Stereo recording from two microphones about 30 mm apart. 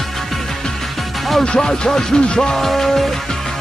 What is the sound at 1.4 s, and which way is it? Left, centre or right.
Speech, left.